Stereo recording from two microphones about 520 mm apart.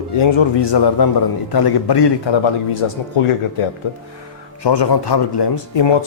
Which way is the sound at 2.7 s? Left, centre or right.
Left.